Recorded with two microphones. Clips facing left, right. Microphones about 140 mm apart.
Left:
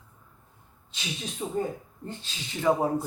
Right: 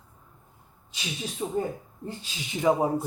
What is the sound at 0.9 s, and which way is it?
Speech, 5° right (ahead or behind).